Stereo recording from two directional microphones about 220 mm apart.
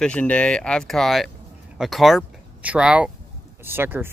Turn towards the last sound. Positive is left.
turn(degrees=-10)  # may be behind; listen again after turning